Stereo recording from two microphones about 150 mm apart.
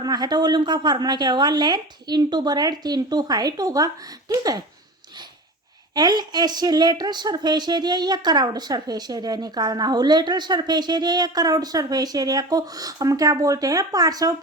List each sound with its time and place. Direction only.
0.0 s speech: 25° right (ahead or behind)
5.9 s speech: 30° right (ahead or behind)